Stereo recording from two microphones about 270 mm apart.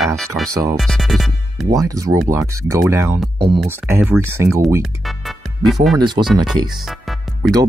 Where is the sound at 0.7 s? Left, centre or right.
Centre.